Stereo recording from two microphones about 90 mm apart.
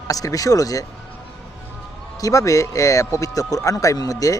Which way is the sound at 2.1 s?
40° left (ahead or behind).